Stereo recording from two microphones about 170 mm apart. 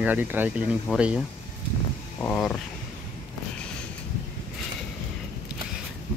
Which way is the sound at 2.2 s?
10° left (ahead or behind).